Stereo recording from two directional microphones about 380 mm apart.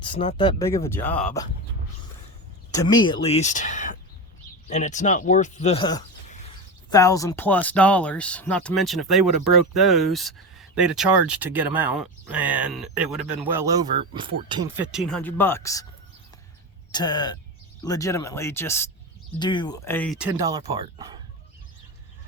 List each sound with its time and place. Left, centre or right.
0.0 s speech: centre
2.7 s speech: centre
16.9 s speech: centre